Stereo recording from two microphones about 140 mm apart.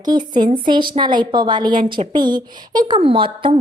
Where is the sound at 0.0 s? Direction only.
30° right (ahead or behind).